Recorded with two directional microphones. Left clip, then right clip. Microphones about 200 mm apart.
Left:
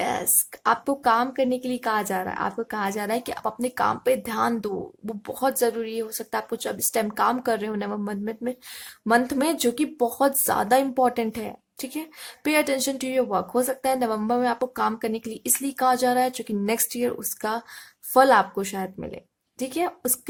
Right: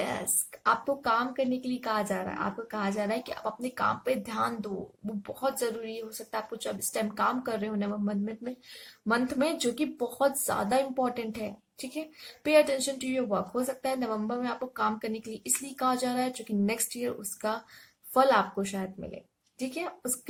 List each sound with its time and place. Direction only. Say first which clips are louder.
0.0 s speech: left 7 dB; 50° left (ahead or behind)